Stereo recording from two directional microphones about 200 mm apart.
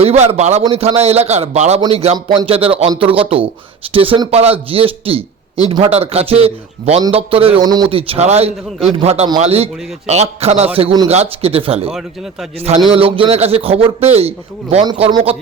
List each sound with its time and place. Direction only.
0.0 s a man's voice: 30° right (ahead or behind)
11.9 s speech: centre (ahead or behind)
12.5 s a man's voice: 30° right (ahead or behind)